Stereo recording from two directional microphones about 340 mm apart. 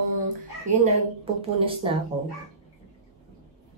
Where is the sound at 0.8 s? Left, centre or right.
Centre.